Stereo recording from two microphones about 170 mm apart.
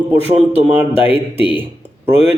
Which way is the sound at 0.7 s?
10° right (ahead or behind).